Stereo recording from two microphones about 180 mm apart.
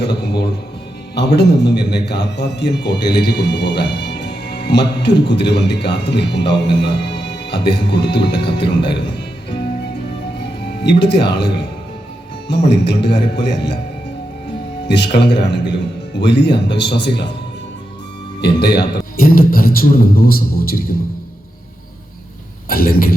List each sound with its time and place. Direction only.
0.0 s a man's voice: 70° left (ahead or behind)
10.4 s a man's voice: 70° left (ahead or behind)
14.8 s a man's voice: 70° left (ahead or behind)
18.4 s a man's voice: 65° left (ahead or behind)
22.7 s a man's voice: 55° left (ahead or behind)